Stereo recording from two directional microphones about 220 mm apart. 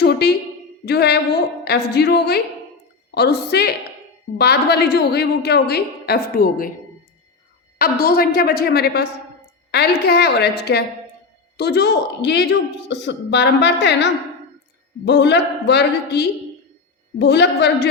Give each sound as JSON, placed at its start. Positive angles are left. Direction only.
{"t": 0.0, "sound": "a sound", "side_deg": 50}
{"t": 0.9, "sound": "a woman's voice", "side_deg": 50}
{"t": 7.8, "sound": "a woman's voice", "side_deg": 45}
{"t": 11.5, "sound": "a woman's voice", "side_deg": 50}